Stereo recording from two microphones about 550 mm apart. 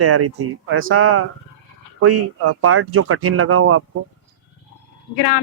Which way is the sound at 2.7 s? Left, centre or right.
Right.